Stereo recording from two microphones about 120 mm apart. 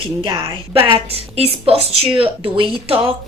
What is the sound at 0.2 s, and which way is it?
Speech, 45° right (ahead or behind).